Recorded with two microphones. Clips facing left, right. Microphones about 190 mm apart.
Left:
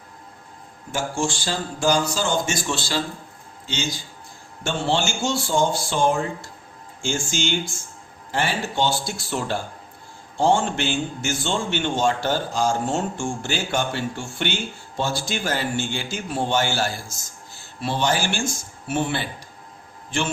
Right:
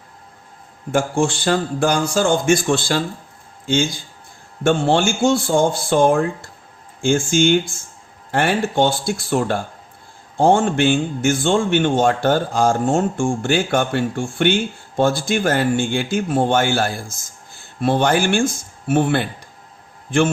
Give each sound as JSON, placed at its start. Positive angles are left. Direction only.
{"t": 0.9, "sound": "a man's voice", "side_deg": -55}